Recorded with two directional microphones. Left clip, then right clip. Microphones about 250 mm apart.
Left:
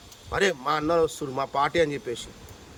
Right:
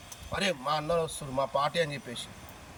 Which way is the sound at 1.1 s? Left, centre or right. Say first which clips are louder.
Left 2 dB; left.